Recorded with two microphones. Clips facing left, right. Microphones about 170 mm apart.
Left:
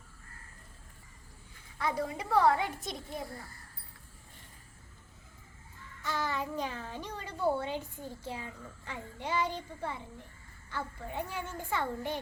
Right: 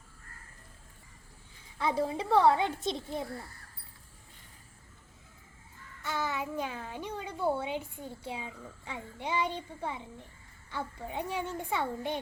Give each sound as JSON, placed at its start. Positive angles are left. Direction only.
{"t": 1.8, "sound": "a woman's voice", "side_deg": -25}
{"t": 6.1, "sound": "a child's voice", "side_deg": -10}